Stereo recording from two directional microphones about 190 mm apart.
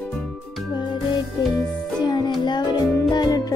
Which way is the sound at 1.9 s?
20° left (ahead or behind).